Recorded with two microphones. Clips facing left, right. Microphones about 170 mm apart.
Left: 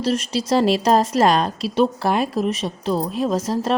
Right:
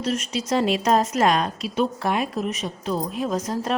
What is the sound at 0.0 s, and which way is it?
Speech, 35° left (ahead or behind).